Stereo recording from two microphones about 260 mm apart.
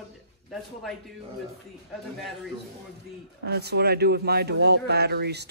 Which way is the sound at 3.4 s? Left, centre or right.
Right.